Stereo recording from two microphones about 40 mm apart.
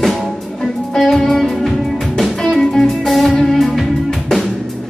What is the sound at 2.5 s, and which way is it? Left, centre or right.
Music, centre.